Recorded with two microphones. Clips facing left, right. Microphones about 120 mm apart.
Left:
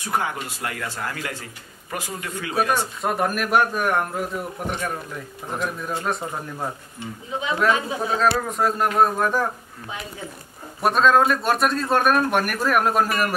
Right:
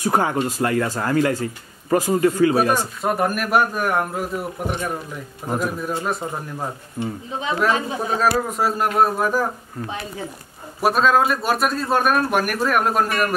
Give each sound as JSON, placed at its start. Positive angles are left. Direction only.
{"t": 0.0, "sound": "speech", "side_deg": -40}
{"t": 3.0, "sound": "a man's voice", "side_deg": 0}
{"t": 7.0, "sound": "speech", "side_deg": -45}
{"t": 8.1, "sound": "a man's voice", "side_deg": -5}
{"t": 10.8, "sound": "a man's voice", "side_deg": -5}